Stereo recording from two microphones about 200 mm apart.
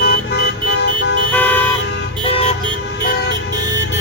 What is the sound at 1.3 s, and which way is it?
Car, 10° left (ahead or behind).